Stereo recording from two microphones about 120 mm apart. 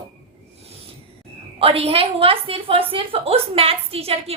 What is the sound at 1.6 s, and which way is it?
A woman's voice, 50° right (ahead or behind).